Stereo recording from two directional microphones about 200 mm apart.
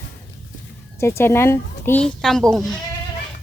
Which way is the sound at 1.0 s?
10° left (ahead or behind).